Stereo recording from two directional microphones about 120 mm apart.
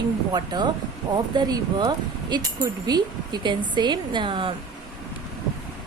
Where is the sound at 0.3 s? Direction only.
35° right (ahead or behind).